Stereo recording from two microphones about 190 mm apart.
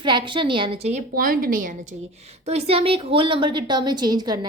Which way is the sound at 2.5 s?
30° right (ahead or behind).